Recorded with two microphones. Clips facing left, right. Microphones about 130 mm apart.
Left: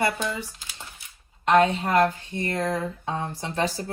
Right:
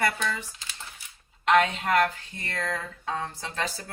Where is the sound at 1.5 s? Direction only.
25° left (ahead or behind).